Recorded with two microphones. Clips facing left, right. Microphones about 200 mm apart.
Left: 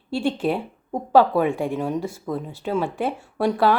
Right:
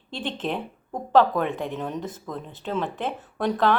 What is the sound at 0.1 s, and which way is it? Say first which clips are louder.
A woman's voice: left 7 dB; 10° left (ahead or behind).